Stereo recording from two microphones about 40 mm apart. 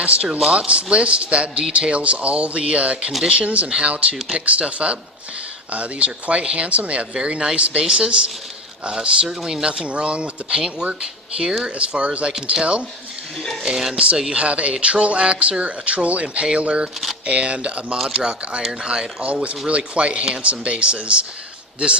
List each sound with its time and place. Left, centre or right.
0.0 s speech: right
0.3 s speech: centre
0.7 s speech: right; by 9.6 s centre
9.6 s speech: right
11.0 s speech: centre
11.6 s speech: right
13.6 s speech: centre
14.3 s speech: right
17.9 s speech: centre
18.2 s speech: right
19.2 s speech: right